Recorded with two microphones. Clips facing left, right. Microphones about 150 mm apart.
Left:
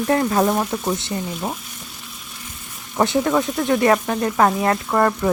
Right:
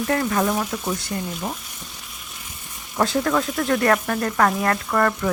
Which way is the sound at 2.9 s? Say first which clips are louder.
Left 3 dB; 20° left (ahead or behind).